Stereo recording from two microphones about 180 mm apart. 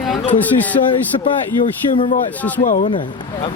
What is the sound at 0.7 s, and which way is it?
Speech, 30° left (ahead or behind).